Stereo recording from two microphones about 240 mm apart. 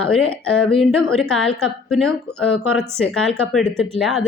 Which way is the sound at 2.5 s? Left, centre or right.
Left.